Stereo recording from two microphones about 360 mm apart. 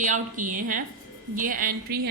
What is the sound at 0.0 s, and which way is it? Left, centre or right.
A woman's voice, right.